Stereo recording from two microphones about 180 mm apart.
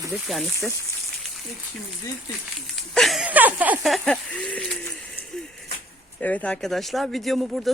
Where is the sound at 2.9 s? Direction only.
Centre (ahead or behind).